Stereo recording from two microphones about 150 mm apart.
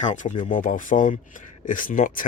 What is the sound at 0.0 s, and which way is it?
Speech, 55° left (ahead or behind).